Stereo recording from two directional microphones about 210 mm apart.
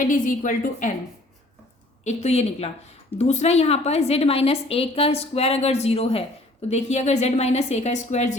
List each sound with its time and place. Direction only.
0.0 s a woman's voice: 40° left (ahead or behind)
2.0 s a woman's voice: 30° left (ahead or behind)